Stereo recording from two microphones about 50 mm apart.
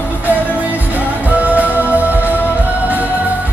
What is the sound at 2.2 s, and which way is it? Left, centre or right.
Music, left.